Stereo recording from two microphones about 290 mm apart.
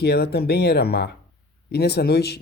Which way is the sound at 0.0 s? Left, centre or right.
Left.